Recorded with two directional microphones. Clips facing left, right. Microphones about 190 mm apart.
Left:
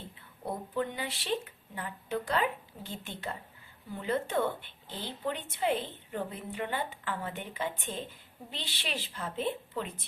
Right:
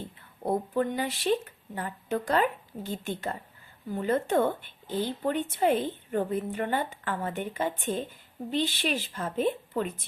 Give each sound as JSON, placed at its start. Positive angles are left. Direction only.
{"t": 0.4, "sound": "a woman's voice", "side_deg": -45}